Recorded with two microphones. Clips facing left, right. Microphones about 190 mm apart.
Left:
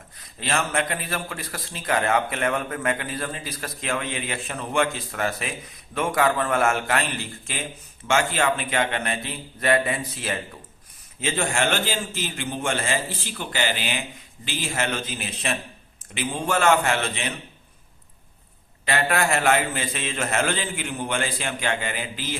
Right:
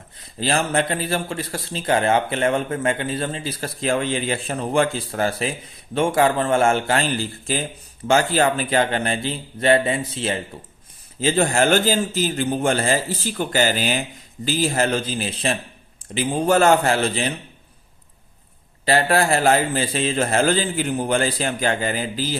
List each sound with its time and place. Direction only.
0.2 s a man's voice: 30° right (ahead or behind)
18.9 s a man's voice: 35° right (ahead or behind)